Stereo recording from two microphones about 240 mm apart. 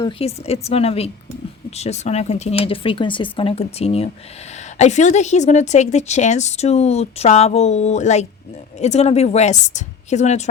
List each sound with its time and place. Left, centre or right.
0.0 s a woman's voice: left